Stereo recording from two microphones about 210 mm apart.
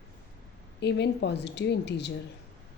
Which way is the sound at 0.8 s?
55° left (ahead or behind).